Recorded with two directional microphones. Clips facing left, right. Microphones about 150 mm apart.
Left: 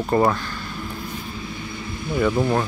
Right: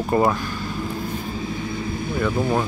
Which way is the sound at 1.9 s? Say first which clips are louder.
Left 3 dB; 50° right (ahead or behind).